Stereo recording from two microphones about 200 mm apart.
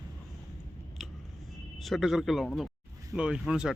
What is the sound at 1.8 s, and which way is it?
Speech, centre (ahead or behind).